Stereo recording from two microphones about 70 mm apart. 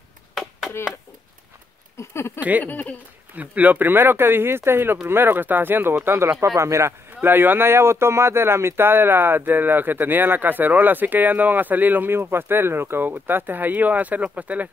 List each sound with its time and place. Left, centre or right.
0.3 s chop: centre
2.0 s speech: left
2.6 s speech: left
3.3 s speech: right
7.2 s speech: right